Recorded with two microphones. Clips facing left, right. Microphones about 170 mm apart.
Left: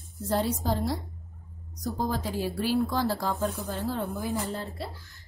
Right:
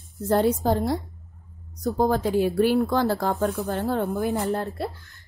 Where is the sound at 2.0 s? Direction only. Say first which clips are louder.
Right 9 dB; 55° right (ahead or behind).